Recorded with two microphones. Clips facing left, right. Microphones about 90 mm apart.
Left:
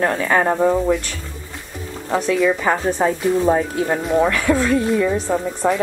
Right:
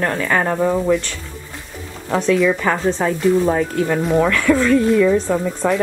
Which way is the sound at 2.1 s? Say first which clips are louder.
Right 2 dB; 5° left (ahead or behind).